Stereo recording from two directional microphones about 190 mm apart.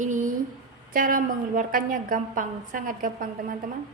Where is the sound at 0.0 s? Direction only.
40° right (ahead or behind).